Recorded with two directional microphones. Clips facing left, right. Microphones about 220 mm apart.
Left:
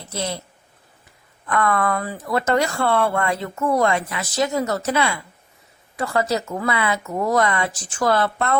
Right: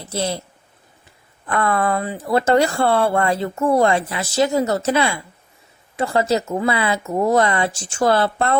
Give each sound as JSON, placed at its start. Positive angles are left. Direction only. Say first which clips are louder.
{"t": 0.1, "sound": "speech", "louder": "right 4 dB", "side_deg": -30}
{"t": 1.5, "sound": "speech", "louder": "right 1 dB", "side_deg": -30}